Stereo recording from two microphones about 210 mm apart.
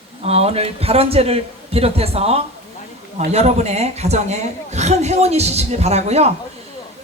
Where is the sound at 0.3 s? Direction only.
30° right (ahead or behind).